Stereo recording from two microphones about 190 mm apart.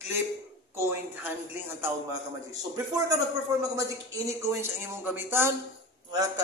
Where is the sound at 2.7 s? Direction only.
20° right (ahead or behind).